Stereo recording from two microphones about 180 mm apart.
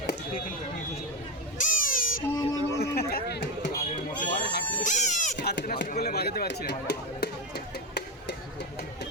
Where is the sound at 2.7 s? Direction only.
60° left (ahead or behind).